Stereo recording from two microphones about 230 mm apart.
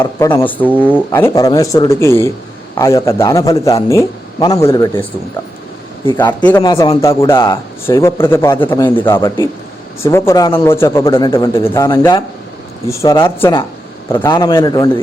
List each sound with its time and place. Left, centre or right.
0.0 s speech: centre
6.4 s speech: centre